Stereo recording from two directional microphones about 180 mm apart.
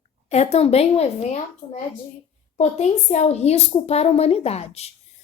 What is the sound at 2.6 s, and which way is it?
A woman's voice, 40° left (ahead or behind).